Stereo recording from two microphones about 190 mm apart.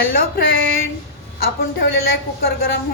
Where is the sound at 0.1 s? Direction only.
50° left (ahead or behind).